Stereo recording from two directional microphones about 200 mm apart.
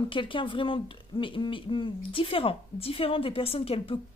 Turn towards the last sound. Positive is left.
turn(degrees=30)  # may be behind; listen again after turning